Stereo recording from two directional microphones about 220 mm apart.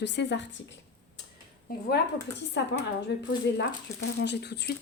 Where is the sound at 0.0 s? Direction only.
55° left (ahead or behind).